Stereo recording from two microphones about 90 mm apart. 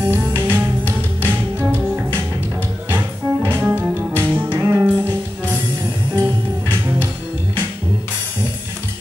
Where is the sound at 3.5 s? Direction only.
20° right (ahead or behind).